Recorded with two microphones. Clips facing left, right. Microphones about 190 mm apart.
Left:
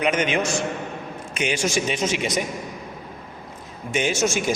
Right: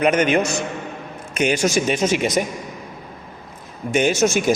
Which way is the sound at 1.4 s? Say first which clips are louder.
Right 5 dB; 45° right (ahead or behind).